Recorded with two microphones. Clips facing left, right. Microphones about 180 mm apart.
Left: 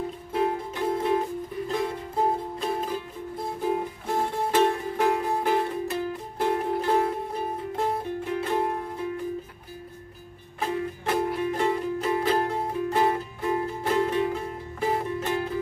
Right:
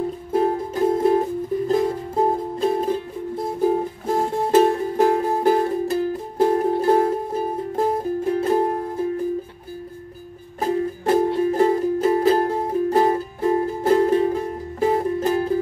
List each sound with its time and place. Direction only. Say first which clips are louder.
0.3 s music: right 6 dB; 40° right (ahead or behind)
10.6 s music: right 7 dB; 35° right (ahead or behind)